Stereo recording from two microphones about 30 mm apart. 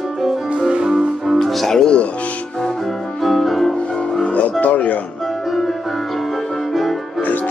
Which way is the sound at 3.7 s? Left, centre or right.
Left.